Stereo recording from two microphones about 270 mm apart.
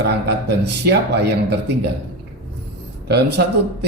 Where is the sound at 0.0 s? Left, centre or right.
Right.